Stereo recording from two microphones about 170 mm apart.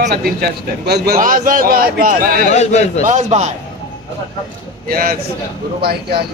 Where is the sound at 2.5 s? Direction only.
40° left (ahead or behind).